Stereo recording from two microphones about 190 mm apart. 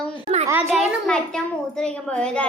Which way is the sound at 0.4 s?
15° right (ahead or behind).